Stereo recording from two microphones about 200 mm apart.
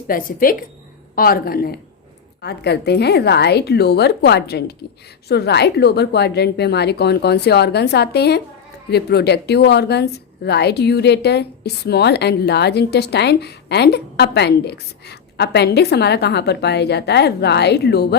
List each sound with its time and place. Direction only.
0.1 s a woman's voice: 45° left (ahead or behind)